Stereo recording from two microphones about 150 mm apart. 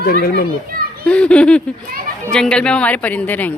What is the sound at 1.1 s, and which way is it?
A woman's voice, 5° left (ahead or behind).